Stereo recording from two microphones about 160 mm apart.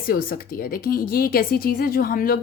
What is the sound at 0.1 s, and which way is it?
Speech, 65° left (ahead or behind).